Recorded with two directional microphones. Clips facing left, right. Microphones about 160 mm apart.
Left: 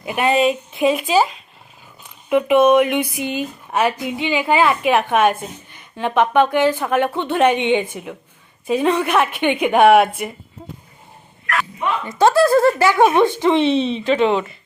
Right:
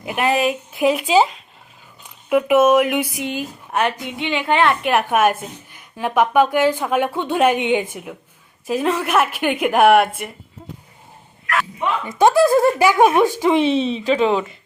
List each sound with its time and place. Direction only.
0.0 s speech: 5° right (ahead or behind)
1.0 s speech: 15° right (ahead or behind)
2.3 s speech: 5° right (ahead or behind)
12.2 s speech: 15° right (ahead or behind)